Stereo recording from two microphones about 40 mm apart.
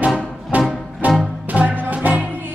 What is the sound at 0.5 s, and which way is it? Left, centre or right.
Music, right.